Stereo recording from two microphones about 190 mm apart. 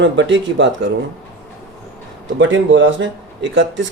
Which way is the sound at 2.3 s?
75° right (ahead or behind).